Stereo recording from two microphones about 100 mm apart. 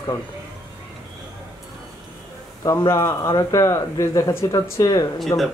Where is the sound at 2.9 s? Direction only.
25° left (ahead or behind).